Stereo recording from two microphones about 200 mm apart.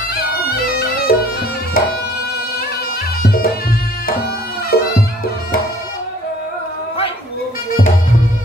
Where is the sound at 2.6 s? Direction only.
50° left (ahead or behind).